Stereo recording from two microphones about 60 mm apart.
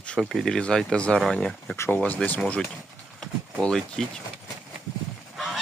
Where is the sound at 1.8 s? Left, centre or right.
Left.